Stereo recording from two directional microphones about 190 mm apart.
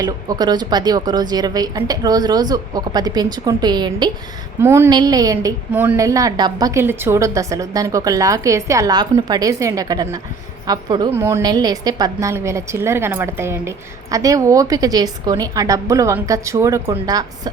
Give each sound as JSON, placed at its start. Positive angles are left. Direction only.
{"t": 0.0, "sound": "a woman's voice", "side_deg": -20}